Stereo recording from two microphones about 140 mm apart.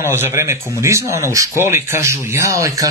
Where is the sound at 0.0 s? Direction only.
20° right (ahead or behind).